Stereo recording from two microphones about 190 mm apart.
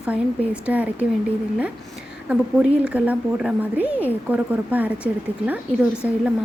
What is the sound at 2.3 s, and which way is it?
A woman's voice, 5° right (ahead or behind).